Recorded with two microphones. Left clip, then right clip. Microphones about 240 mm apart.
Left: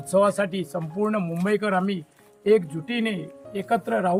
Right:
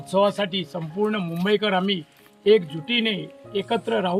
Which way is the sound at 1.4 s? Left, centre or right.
Centre.